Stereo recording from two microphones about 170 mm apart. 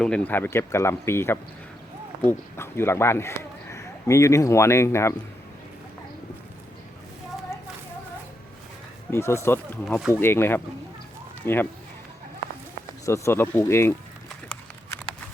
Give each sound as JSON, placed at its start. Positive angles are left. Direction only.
{"t": 0.0, "sound": "speech", "side_deg": 10}
{"t": 9.0, "sound": "speech", "side_deg": 15}
{"t": 13.1, "sound": "speech", "side_deg": 15}